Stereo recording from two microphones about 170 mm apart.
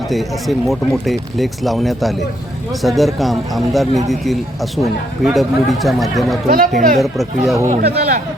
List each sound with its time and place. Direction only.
0.1 s speech: centre (ahead or behind)
6.5 s speech: 55° right (ahead or behind)
7.0 s speech: centre (ahead or behind)
7.8 s speech: 65° right (ahead or behind)